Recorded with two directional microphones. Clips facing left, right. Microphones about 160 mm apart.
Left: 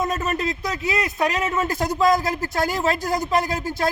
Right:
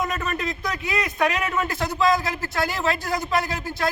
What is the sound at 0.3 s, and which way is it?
A man's voice, 40° left (ahead or behind).